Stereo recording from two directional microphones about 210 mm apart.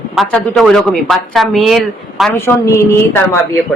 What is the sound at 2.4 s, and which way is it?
Speech, 15° left (ahead or behind).